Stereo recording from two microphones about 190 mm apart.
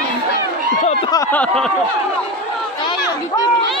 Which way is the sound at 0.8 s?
25° left (ahead or behind).